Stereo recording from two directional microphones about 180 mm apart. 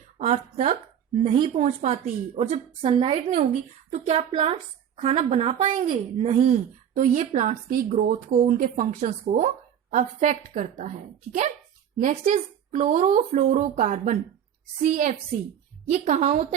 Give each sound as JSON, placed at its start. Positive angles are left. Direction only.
{"t": 0.2, "sound": "a woman's voice", "side_deg": -40}
{"t": 1.5, "sound": "a woman's voice", "side_deg": -40}